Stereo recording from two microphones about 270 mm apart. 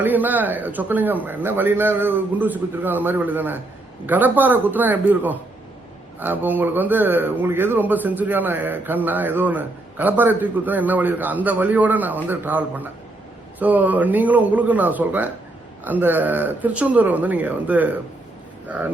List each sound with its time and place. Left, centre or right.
0.0 s speech: centre